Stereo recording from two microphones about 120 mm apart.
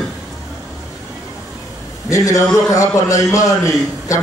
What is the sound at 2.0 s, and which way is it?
A man's voice, 25° left (ahead or behind).